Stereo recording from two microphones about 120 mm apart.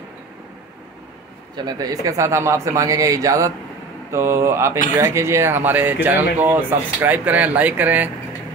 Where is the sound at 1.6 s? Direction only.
35° right (ahead or behind).